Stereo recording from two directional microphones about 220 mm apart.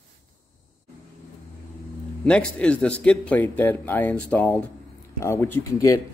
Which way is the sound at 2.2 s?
5° left (ahead or behind).